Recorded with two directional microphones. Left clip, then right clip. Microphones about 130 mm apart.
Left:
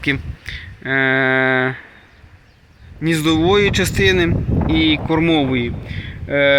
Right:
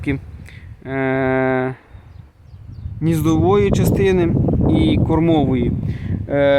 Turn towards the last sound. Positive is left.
turn(degrees=-45)  # may be behind; listen again after turning